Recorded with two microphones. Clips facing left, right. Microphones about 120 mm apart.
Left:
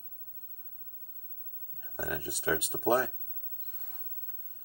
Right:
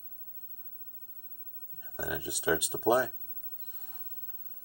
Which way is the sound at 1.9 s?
5° right (ahead or behind).